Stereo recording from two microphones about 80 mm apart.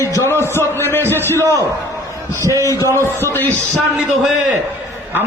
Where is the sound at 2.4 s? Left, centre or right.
Right.